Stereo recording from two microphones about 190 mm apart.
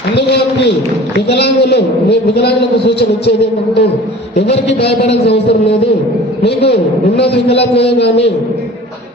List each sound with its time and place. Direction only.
1.3 s a man's voice: 60° left (ahead or behind)
5.0 s a man's voice: 60° left (ahead or behind)